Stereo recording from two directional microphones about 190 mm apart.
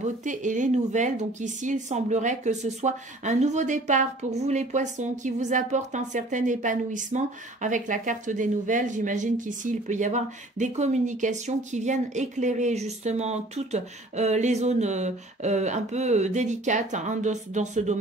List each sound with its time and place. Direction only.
0.0 s speech: 40° right (ahead or behind)